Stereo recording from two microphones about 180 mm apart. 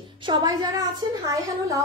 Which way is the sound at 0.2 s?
25° right (ahead or behind).